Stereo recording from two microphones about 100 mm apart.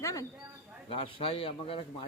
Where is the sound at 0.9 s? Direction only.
65° left (ahead or behind).